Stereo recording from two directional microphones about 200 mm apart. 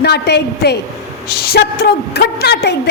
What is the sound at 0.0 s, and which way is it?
A woman's voice, 55° left (ahead or behind).